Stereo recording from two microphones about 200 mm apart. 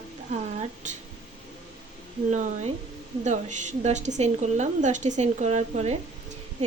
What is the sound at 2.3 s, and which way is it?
A woman's voice, 35° right (ahead or behind).